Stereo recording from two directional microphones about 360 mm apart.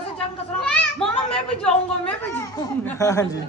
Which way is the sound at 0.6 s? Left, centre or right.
Centre.